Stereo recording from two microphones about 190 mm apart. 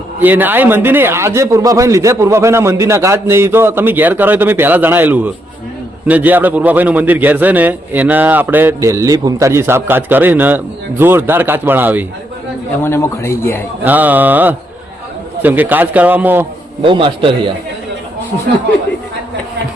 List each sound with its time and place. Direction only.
0.2 s a man's voice: 10° right (ahead or behind)
12.8 s speech: 15° left (ahead or behind)
13.8 s a man's voice: 10° right (ahead or behind)
16.8 s a man's voice: 25° right (ahead or behind)